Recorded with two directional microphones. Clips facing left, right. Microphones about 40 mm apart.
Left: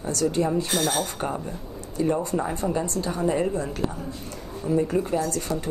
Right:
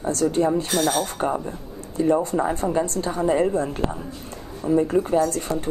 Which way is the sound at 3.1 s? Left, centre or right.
Right.